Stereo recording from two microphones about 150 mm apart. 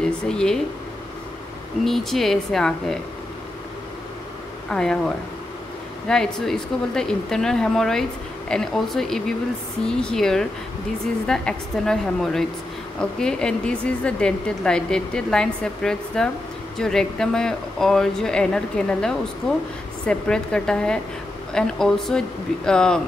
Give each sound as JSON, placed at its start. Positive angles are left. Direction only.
{"t": 0.3, "sound": "a woman's voice", "side_deg": 5}
{"t": 1.9, "sound": "a woman's voice", "side_deg": 0}
{"t": 4.6, "sound": "a woman's voice", "side_deg": 5}